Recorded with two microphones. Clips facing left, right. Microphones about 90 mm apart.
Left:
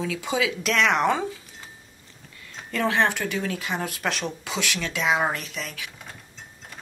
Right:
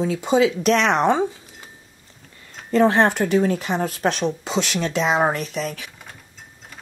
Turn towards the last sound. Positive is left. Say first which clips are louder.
# right 8 dB
turn(degrees=-40)  # may be behind; listen again after turning